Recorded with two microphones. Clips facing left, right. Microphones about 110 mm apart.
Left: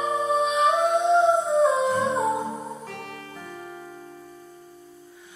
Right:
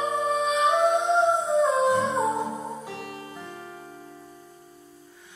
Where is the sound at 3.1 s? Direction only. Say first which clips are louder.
Even; 30° right (ahead or behind).